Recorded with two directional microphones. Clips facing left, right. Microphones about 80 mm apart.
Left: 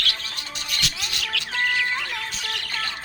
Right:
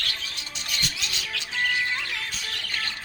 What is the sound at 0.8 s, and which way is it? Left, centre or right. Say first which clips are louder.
Music: left 3 dB; left.